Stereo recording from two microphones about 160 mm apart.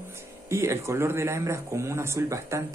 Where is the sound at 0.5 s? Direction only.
15° right (ahead or behind).